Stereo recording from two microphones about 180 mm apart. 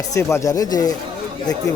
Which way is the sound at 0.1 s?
15° left (ahead or behind).